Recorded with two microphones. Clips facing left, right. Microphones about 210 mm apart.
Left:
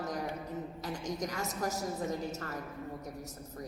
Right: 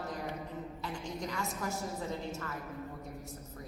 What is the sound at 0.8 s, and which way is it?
A woman's voice, 40° left (ahead or behind).